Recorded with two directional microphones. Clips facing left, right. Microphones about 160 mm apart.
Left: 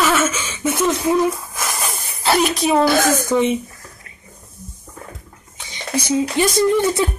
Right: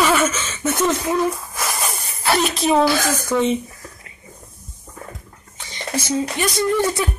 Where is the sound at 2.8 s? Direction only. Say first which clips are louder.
Left 4 dB; 50° left (ahead or behind).